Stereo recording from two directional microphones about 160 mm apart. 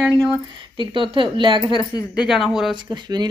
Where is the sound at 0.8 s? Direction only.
30° right (ahead or behind).